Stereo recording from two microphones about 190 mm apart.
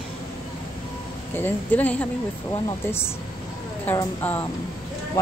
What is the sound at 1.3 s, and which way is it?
A woman's voice, 10° left (ahead or behind).